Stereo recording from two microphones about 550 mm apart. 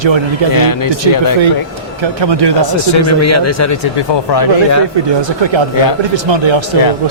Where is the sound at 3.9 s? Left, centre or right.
Left.